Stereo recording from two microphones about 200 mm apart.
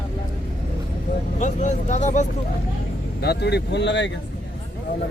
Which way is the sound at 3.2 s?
55° left (ahead or behind).